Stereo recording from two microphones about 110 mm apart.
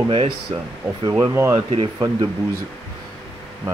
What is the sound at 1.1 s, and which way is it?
Speech, 30° right (ahead or behind).